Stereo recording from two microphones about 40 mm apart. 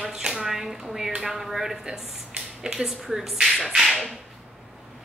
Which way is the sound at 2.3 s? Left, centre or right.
Centre.